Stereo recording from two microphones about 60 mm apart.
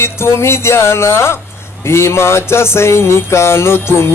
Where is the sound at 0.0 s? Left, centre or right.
Left.